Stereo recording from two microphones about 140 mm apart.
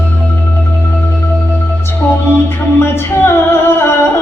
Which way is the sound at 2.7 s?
20° left (ahead or behind).